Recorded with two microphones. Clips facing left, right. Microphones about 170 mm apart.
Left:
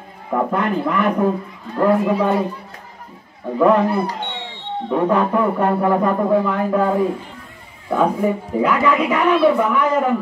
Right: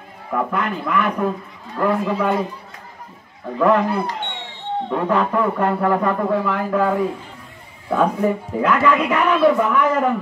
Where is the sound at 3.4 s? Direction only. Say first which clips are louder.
Left 2 dB; 15° left (ahead or behind).